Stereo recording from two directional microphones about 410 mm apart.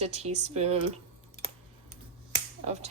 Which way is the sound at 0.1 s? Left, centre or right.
Centre.